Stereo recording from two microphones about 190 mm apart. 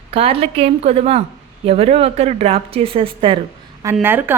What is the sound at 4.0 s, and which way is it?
Speech, 10° right (ahead or behind).